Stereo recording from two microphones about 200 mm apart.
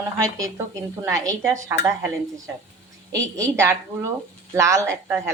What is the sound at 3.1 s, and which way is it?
A woman's voice, 15° right (ahead or behind).